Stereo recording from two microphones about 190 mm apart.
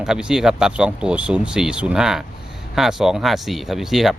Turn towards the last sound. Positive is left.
turn(degrees=0)  # may be behind; listen again after turning